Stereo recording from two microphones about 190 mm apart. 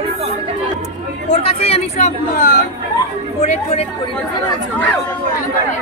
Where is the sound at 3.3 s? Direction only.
35° left (ahead or behind).